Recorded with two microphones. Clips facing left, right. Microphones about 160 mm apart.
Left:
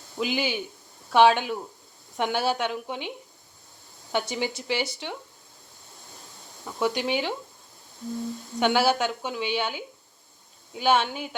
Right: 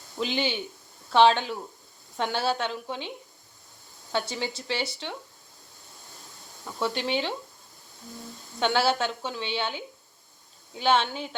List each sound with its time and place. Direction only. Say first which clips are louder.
0.2 s speech: left 1 dB; 10° left (ahead or behind)
4.1 s speech: left 2 dB; 15° left (ahead or behind)
6.7 s speech: left 2 dB; 10° left (ahead or behind)
8.5 s speech: left 2 dB; 15° left (ahead or behind)